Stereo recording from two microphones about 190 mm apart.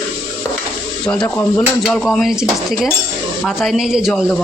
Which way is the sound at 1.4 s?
5° left (ahead or behind).